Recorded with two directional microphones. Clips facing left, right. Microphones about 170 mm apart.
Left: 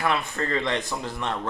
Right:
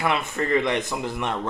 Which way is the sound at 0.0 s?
20° right (ahead or behind).